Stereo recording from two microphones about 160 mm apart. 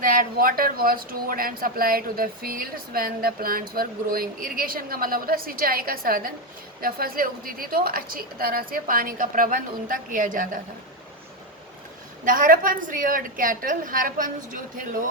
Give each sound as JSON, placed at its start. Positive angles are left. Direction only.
{"t": 0.0, "sound": "speech", "side_deg": -65}
{"t": 12.2, "sound": "speech", "side_deg": -55}